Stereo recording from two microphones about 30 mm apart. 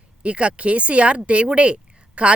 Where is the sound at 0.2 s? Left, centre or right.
Right.